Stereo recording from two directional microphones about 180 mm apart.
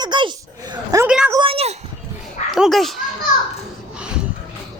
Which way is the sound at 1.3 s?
25° right (ahead or behind).